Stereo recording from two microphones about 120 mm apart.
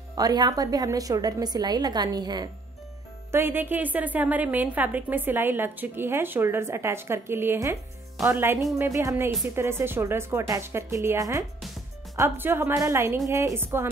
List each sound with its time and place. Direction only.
0.1 s a woman's voice: 35° right (ahead or behind)
3.3 s a woman's voice: 20° right (ahead or behind)